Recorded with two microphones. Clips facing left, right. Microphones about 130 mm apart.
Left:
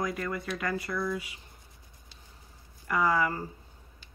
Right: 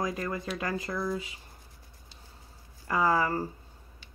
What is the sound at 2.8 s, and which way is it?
Speech, 30° right (ahead or behind).